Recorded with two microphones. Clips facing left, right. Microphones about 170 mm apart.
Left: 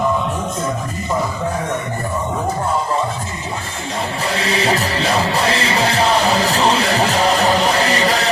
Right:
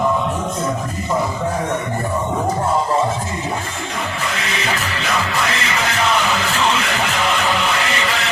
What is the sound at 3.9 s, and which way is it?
Music, 35° left (ahead or behind).